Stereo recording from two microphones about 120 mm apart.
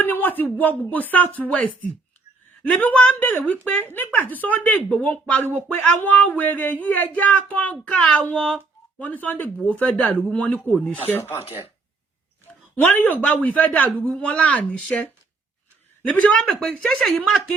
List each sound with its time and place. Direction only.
0.0 s speech: 15° left (ahead or behind)
12.7 s speech: 15° left (ahead or behind)
16.1 s speech: 10° left (ahead or behind)